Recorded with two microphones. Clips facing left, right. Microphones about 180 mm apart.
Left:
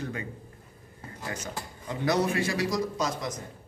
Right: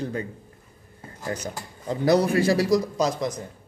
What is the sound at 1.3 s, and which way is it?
A man's voice, 35° right (ahead or behind).